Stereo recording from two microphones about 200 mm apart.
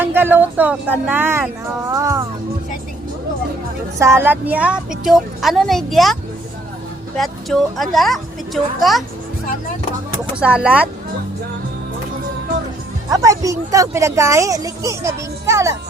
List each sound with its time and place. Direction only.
0.0 s speech: 10° right (ahead or behind)
3.9 s a woman's voice: 15° right (ahead or behind)
7.2 s a woman's voice: centre (ahead or behind)
10.4 s a woman's voice: 5° right (ahead or behind)
13.1 s speech: 15° right (ahead or behind)